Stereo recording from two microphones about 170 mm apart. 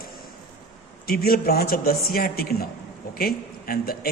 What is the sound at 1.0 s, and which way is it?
A woman's voice, 60° left (ahead or behind).